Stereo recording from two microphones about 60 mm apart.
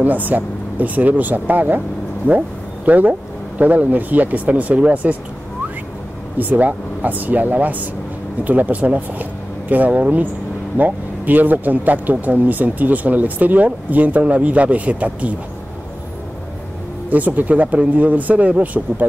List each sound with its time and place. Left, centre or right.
0.0 s speech: right
6.3 s speech: right
17.1 s speech: right